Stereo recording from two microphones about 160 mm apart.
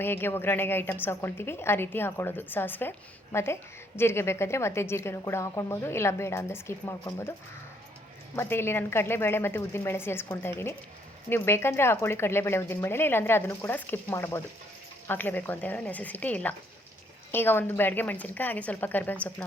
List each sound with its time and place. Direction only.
0.0 s a woman's voice: 15° left (ahead or behind)
8.4 s a woman's voice: 15° left (ahead or behind)